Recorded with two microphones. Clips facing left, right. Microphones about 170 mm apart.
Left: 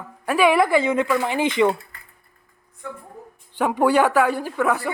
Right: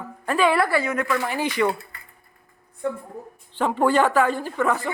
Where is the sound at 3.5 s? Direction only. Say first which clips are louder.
Left 2 dB; 10° left (ahead or behind).